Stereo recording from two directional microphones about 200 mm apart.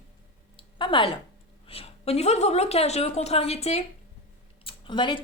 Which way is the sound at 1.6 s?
30° left (ahead or behind).